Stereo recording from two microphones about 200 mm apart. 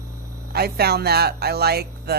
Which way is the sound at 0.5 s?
50° right (ahead or behind).